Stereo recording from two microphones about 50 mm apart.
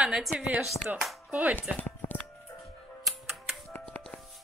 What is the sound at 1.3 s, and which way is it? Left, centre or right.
Speech, right.